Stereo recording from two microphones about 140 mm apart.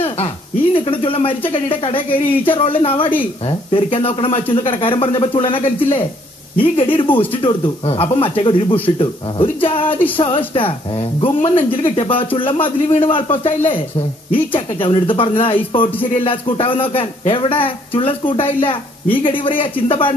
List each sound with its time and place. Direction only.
0.7 s a man's voice: 40° left (ahead or behind)